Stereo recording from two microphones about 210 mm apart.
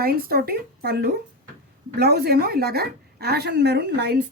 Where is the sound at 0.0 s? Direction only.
45° right (ahead or behind).